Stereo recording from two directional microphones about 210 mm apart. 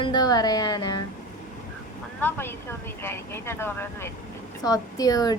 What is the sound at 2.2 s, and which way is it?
Speech, 10° left (ahead or behind).